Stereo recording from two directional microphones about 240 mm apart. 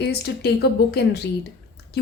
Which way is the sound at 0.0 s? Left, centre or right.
Left.